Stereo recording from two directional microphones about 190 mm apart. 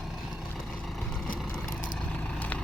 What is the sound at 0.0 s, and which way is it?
Vehicle, centre (ahead or behind).